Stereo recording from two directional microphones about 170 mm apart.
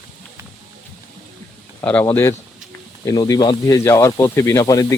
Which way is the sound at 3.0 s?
20° left (ahead or behind).